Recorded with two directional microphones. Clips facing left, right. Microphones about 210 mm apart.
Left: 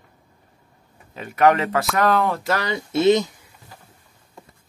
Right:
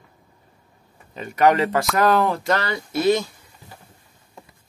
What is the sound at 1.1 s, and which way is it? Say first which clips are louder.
Speech: even; centre (ahead or behind).